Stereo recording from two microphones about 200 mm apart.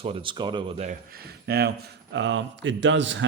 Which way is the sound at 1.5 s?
50° right (ahead or behind).